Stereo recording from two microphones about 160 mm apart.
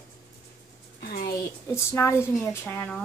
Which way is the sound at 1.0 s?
65° left (ahead or behind).